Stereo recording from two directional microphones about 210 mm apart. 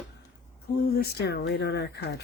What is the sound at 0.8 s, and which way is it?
Speech, 45° left (ahead or behind).